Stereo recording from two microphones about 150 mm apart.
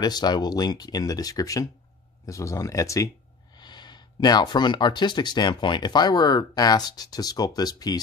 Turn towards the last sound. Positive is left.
turn(degrees=25)  # may be behind; listen again after turning